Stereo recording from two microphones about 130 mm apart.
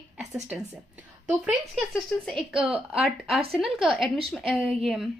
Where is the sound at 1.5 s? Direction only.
Centre (ahead or behind).